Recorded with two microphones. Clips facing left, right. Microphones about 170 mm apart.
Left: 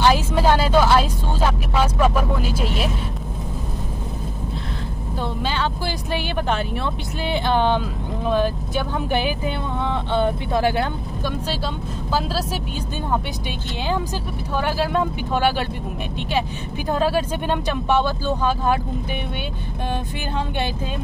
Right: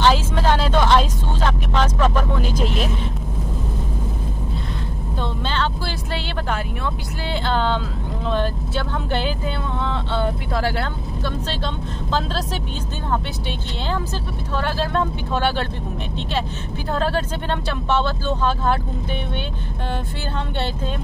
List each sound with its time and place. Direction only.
0.0 s vehicle: 10° left (ahead or behind)
5.2 s vehicle: 10° left (ahead or behind)
7.2 s speech: 15° left (ahead or behind)
13.1 s speech: 15° left (ahead or behind)
16.9 s speech: 10° left (ahead or behind)